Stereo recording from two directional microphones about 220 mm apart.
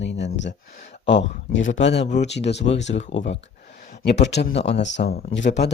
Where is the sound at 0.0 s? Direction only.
55° left (ahead or behind).